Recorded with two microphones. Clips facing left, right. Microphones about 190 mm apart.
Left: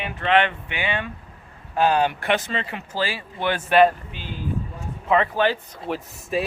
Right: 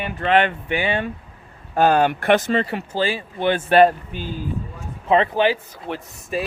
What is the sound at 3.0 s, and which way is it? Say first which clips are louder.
Speech: right 4 dB; 25° right (ahead or behind).